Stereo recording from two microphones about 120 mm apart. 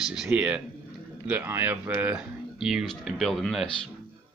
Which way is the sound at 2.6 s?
5° right (ahead or behind).